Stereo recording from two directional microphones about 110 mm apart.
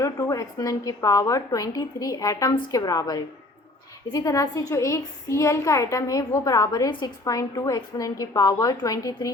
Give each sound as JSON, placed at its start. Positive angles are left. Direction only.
{"t": 0.0, "sound": "a woman's voice", "side_deg": 30}